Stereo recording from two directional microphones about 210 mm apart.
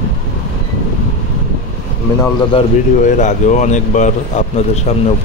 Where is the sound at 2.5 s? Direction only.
35° left (ahead or behind).